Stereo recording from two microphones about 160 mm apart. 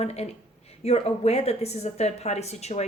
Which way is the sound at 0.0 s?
40° left (ahead or behind).